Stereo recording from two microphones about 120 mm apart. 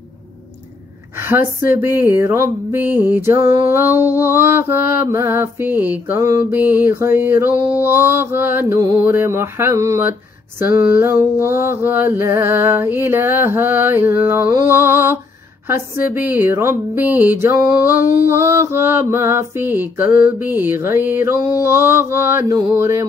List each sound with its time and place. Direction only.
1.1 s music: 20° right (ahead or behind)